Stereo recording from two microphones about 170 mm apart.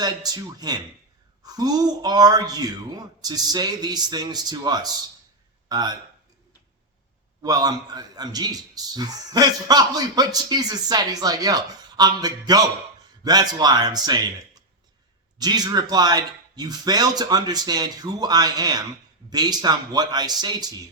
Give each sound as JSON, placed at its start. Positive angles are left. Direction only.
{"t": 0.0, "sound": "a man's voice", "side_deg": -25}
{"t": 7.4, "sound": "a man's voice", "side_deg": -20}